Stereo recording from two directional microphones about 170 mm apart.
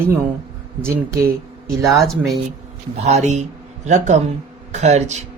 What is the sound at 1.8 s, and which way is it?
Speech, centre (ahead or behind).